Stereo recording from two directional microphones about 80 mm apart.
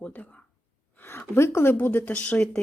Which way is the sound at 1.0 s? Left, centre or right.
Left.